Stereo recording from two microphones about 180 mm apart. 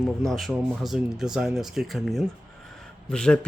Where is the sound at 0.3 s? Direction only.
Centre (ahead or behind).